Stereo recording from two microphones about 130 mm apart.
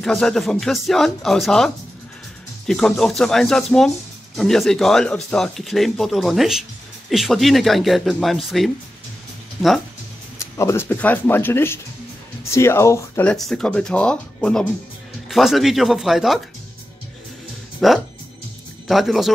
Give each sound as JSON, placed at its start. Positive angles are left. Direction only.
{"t": 0.0, "sound": "speech", "side_deg": 5}
{"t": 10.6, "sound": "speech", "side_deg": 20}
{"t": 13.2, "sound": "speech", "side_deg": 5}
{"t": 17.8, "sound": "speech", "side_deg": 0}